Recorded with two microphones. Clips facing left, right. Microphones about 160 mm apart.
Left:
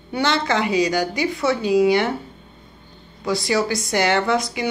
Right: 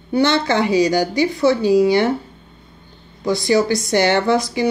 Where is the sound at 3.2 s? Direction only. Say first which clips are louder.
Right 4 dB; 30° right (ahead or behind).